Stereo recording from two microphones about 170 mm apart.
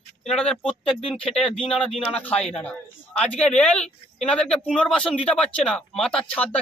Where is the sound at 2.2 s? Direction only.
10° left (ahead or behind).